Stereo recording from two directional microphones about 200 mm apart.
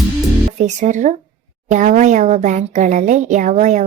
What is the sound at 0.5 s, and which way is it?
Speech, 35° right (ahead or behind).